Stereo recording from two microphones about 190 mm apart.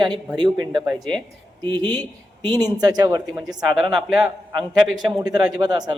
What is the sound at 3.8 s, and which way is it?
Speech, centre (ahead or behind).